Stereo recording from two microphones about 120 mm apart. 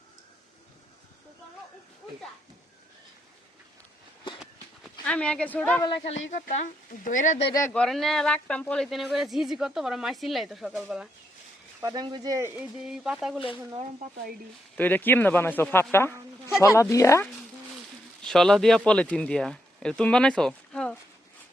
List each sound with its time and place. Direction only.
5.0 s speech: 10° left (ahead or behind)
6.1 s speech: 85° left
7.7 s speech: 5° left (ahead or behind)
11.8 s speech: 35° right (ahead or behind)
12.5 s speech: 5° right (ahead or behind)
14.8 s speech: 15° left (ahead or behind)
18.2 s speech: 5° left (ahead or behind)